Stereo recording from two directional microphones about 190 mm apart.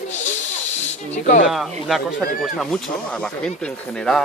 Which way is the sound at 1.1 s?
40° left (ahead or behind).